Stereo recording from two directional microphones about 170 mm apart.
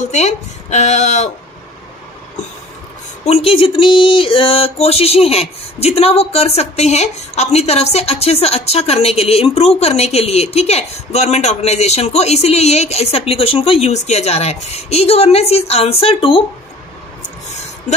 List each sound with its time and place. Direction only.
0.1 s speech: 45° left (ahead or behind)
3.3 s speech: 35° left (ahead or behind)